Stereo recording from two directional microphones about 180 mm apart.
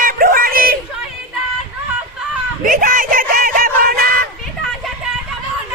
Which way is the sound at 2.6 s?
50° right (ahead or behind).